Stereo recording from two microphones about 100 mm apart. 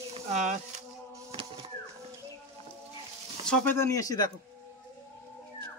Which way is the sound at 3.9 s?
35° left (ahead or behind).